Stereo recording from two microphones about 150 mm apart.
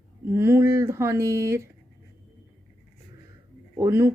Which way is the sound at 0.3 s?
15° right (ahead or behind).